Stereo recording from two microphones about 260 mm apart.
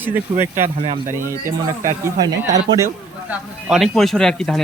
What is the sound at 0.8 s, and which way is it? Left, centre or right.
Speech, right.